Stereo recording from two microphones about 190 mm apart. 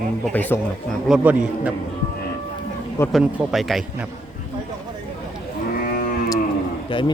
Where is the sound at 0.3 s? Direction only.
10° left (ahead or behind).